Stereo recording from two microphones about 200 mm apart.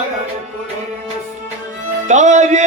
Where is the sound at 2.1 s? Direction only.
35° right (ahead or behind).